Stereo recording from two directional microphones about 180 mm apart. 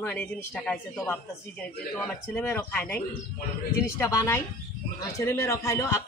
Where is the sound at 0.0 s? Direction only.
10° left (ahead or behind).